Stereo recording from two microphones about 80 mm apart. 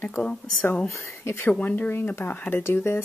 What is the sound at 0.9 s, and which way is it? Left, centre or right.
Speech, left.